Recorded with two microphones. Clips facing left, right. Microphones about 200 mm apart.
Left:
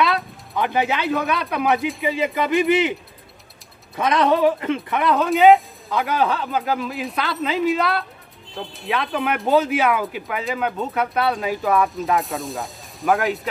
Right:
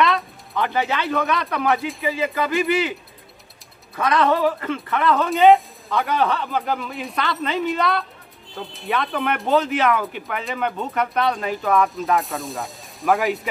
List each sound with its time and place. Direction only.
0.0 s speech: 10° left (ahead or behind)
3.9 s speech: 20° left (ahead or behind)
5.2 s speech: centre (ahead or behind)